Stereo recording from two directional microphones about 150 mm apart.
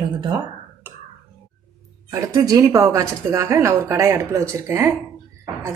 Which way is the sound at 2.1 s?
25° right (ahead or behind).